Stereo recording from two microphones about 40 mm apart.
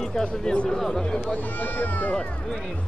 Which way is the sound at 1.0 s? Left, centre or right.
Left.